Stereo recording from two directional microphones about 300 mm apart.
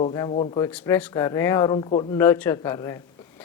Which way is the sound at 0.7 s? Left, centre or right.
Centre.